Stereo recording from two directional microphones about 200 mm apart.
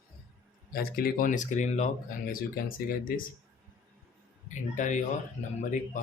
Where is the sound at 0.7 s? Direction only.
45° left (ahead or behind).